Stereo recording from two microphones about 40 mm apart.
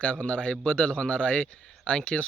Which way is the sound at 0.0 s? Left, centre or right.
Left.